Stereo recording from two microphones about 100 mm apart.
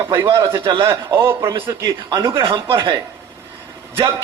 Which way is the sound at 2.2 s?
55° right (ahead or behind).